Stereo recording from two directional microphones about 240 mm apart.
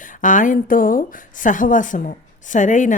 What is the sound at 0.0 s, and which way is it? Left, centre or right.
A woman's voice, left.